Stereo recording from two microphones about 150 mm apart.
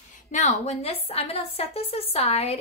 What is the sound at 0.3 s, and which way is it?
A woman's voice, 55° left (ahead or behind).